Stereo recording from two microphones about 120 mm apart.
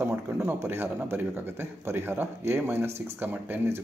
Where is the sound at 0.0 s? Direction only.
20° right (ahead or behind).